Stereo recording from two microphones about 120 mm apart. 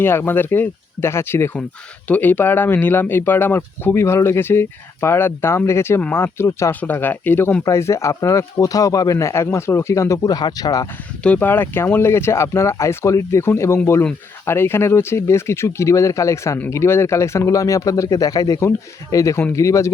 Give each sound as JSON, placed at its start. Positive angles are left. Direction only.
{"t": 0.0, "sound": "speech", "side_deg": 20}
{"t": 11.2, "sound": "speech", "side_deg": 15}